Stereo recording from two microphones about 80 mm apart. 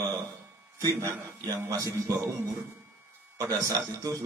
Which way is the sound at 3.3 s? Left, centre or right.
Right.